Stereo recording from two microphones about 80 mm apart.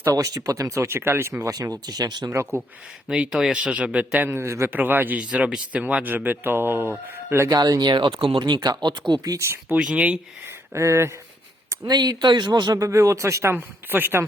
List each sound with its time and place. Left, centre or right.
0.0 s speech: right
1.4 s speech: right
1.9 s speech: right
2.3 s speech: right
3.1 s speech: centre
4.3 s speech: right
4.7 s speech: right
7.4 s speech: right
9.7 s speech: centre
10.8 s speech: right
11.8 s speech: right
12.8 s speech: right
13.6 s speech: right